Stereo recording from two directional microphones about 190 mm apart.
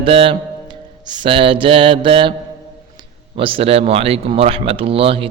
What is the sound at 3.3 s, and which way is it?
Mantra, 30° right (ahead or behind).